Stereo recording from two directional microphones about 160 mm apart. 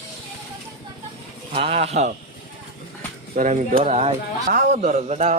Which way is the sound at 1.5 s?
35° right (ahead or behind).